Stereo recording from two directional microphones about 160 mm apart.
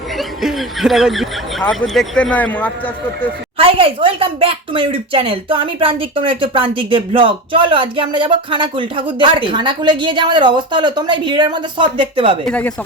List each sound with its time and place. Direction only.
0.2 s speech: centre (ahead or behind)
3.6 s speech: 35° right (ahead or behind)
12.5 s speech: 10° left (ahead or behind)